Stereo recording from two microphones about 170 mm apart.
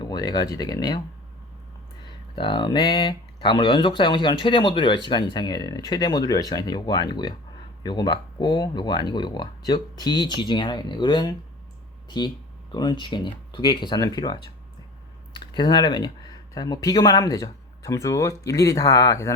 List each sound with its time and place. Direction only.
0.0 s speech: 25° left (ahead or behind)
2.0 s speech: 30° left (ahead or behind)